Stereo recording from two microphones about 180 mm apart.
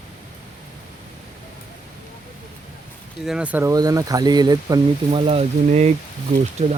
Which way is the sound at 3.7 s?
20° right (ahead or behind).